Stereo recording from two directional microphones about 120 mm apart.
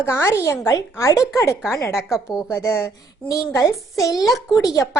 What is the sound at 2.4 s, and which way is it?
A woman's voice, 20° left (ahead or behind).